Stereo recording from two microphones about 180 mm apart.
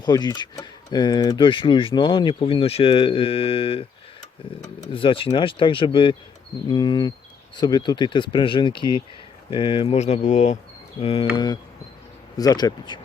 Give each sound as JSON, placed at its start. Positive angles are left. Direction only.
{"t": 0.0, "sound": "speech", "side_deg": 20}